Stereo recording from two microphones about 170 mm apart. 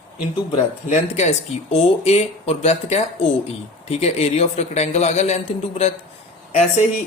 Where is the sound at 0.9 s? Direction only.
40° left (ahead or behind).